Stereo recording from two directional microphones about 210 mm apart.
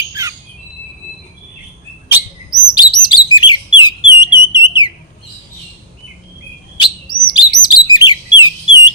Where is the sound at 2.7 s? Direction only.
20° left (ahead or behind).